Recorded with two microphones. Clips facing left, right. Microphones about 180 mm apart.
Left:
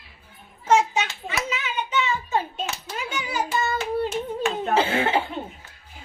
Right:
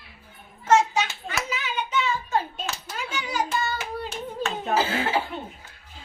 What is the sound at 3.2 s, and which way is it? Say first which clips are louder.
Child singing: even; 5° left (ahead or behind).